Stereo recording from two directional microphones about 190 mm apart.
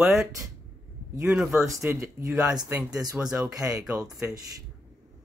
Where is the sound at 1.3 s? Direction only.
15° right (ahead or behind).